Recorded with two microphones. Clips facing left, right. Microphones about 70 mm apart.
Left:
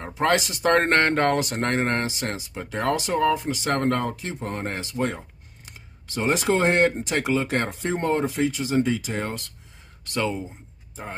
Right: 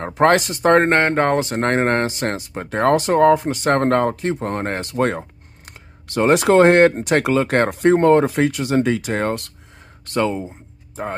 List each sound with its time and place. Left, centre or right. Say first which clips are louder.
0.0 s speech: right 7 dB; right
0.7 s speech: right 3 dB; right
10.0 s speech: right 6 dB; right